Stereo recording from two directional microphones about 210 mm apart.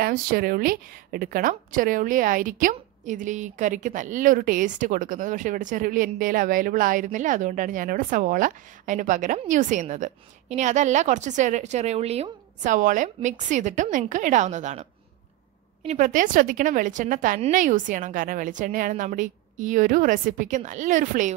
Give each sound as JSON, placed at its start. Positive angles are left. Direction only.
{"t": 0.0, "sound": "a woman's voice", "side_deg": -45}
{"t": 15.9, "sound": "a woman's voice", "side_deg": -35}